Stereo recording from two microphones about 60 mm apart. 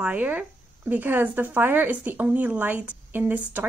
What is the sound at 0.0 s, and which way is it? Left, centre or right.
Speech, right.